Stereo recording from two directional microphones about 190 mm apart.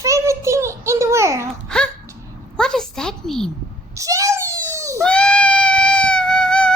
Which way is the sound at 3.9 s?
15° right (ahead or behind).